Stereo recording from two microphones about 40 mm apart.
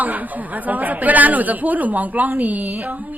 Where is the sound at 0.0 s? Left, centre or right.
Right.